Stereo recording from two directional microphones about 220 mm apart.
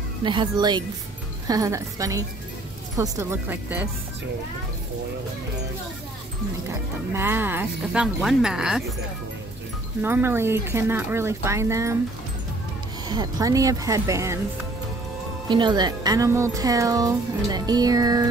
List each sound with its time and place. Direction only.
0.2 s a woman's voice: 20° right (ahead or behind)
7.2 s speech: 10° right (ahead or behind)
10.0 s speech: 10° right (ahead or behind)
13.1 s speech: 15° right (ahead or behind)
15.4 s speech: 20° right (ahead or behind)